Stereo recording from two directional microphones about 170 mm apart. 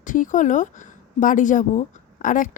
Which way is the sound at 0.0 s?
50° left (ahead or behind).